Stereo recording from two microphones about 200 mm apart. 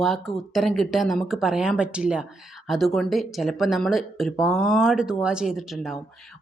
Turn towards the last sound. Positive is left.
turn(degrees=0)  # may be behind; listen again after turning